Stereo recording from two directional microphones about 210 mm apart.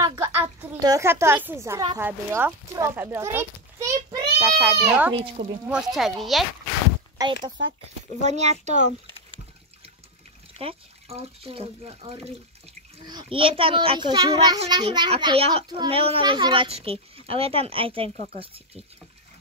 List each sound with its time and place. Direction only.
0.0 s a child's voice: 10° right (ahead or behind)
4.4 s speech: centre (ahead or behind)
5.1 s a child's voice: 25° right (ahead or behind)
5.7 s speech: centre (ahead or behind)
8.2 s a child's voice: 35° right (ahead or behind)
10.6 s a child's voice: 25° right (ahead or behind)